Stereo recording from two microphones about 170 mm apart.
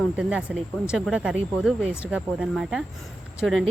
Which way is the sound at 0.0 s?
5° right (ahead or behind).